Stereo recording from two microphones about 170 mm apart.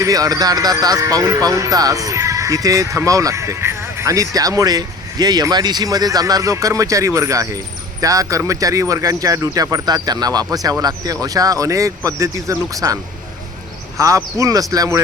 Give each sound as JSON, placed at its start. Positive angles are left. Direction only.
{"t": 0.0, "sound": "speech", "side_deg": -20}
{"t": 14.0, "sound": "speech", "side_deg": -20}